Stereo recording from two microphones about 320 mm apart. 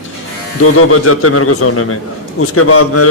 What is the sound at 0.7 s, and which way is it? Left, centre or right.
A man's voice, left.